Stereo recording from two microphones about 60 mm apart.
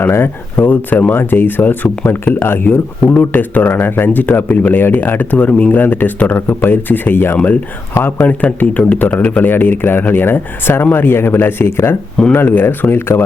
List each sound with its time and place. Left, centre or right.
0.0 s speech: left
0.6 s speech: left
8.2 s speech: left